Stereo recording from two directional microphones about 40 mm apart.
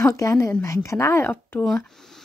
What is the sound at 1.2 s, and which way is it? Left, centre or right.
Speech, left.